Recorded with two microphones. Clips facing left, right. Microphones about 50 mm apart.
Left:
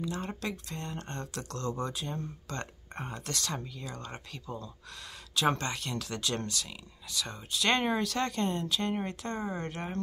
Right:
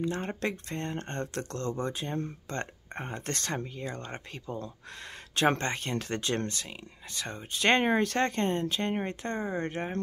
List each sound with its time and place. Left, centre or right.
0.0 s speech: right